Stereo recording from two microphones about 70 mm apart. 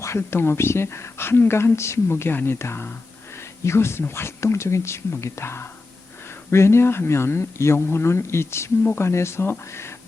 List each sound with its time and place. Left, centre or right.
0.0 s speech: left
8.8 s speech: left
9.0 s speech: left